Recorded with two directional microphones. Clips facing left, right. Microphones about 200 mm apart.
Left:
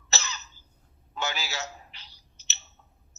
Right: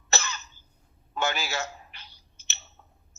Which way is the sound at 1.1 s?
55° right (ahead or behind).